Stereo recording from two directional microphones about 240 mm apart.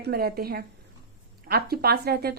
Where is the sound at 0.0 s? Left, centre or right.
Right.